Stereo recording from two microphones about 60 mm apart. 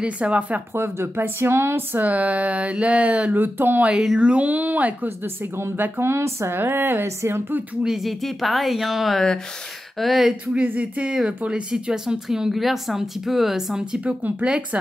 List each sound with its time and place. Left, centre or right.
0.0 s a woman's voice: right
0.7 s speech: right
4.2 s a woman's voice: right
5.2 s speech: right
7.8 s speech: centre
10.4 s a woman's voice: right
14.0 s a woman's voice: right